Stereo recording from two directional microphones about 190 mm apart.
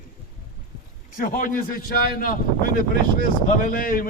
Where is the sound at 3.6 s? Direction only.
45° left (ahead or behind).